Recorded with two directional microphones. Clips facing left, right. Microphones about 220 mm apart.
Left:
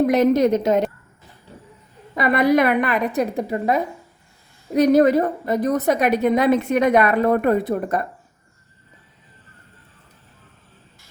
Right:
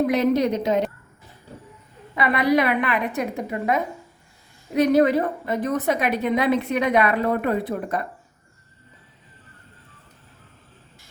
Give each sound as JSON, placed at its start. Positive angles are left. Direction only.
{"t": 0.1, "sound": "a woman's voice", "side_deg": 45}
{"t": 2.1, "sound": "a woman's voice", "side_deg": 45}